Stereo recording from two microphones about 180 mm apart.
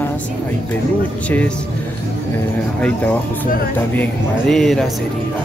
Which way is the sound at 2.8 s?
5° left (ahead or behind).